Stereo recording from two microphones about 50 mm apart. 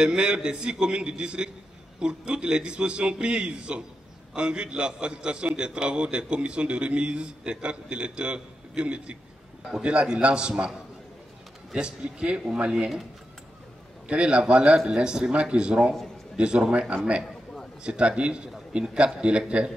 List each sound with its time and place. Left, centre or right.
0.0 s a man's voice: centre
11.7 s a man's voice: centre
14.0 s a man's voice: right